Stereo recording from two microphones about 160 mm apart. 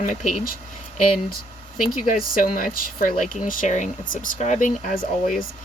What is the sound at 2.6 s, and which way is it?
Speech, 60° left (ahead or behind).